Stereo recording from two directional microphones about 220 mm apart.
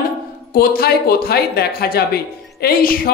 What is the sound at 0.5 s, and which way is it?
Speech, 45° left (ahead or behind).